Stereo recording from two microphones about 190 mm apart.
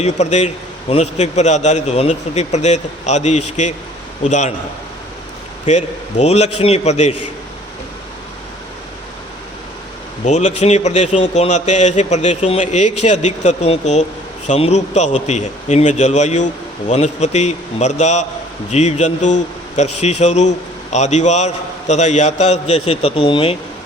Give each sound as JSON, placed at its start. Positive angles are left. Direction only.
{"t": 0.0, "sound": "a man's voice", "side_deg": 35}
{"t": 5.6, "sound": "a man's voice", "side_deg": 35}
{"t": 10.2, "sound": "a man's voice", "side_deg": 40}